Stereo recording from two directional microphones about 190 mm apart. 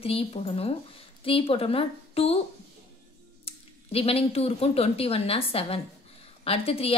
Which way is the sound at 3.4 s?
30° left (ahead or behind).